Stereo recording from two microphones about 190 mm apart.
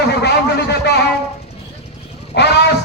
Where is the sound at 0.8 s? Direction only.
60° left (ahead or behind).